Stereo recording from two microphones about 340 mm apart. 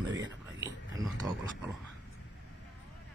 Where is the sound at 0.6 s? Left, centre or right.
Centre.